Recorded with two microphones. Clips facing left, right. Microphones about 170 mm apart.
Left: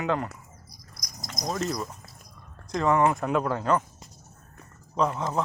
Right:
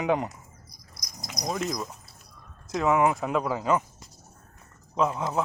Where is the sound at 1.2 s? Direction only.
5° right (ahead or behind).